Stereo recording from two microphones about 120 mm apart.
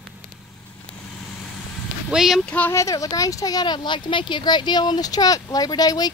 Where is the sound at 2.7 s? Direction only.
30° left (ahead or behind).